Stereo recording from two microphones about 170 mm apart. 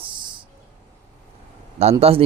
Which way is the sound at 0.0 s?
30° right (ahead or behind).